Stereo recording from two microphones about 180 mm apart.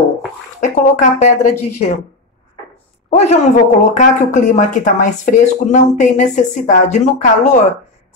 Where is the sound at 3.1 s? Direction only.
40° left (ahead or behind).